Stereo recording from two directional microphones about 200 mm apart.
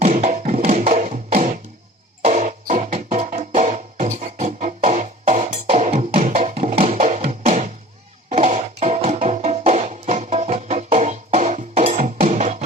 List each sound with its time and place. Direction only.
0.0 s music: 40° right (ahead or behind)